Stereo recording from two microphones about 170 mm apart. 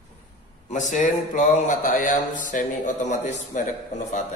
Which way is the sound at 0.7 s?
45° left (ahead or behind).